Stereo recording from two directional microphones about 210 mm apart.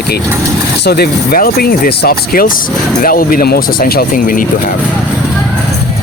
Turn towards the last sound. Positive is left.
turn(degrees=40)  # may be behind; listen again after turning